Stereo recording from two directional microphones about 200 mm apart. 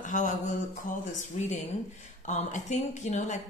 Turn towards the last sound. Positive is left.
turn(degrees=35)  # may be behind; listen again after turning